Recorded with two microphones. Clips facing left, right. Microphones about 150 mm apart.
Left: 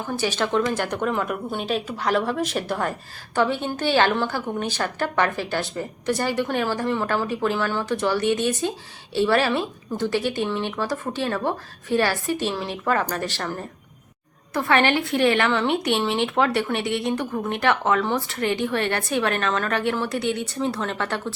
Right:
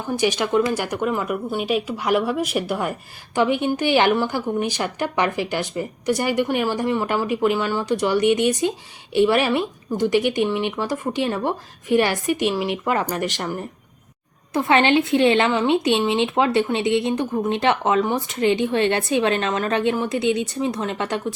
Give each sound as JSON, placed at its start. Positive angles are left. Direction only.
{"t": 0.1, "sound": "a woman's voice", "side_deg": -15}